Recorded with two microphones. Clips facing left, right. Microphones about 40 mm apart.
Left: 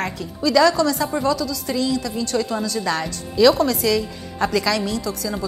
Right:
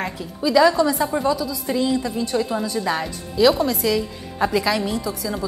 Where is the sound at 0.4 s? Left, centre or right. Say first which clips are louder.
Even; centre.